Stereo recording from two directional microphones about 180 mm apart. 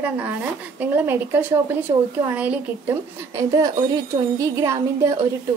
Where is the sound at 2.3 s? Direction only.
10° right (ahead or behind).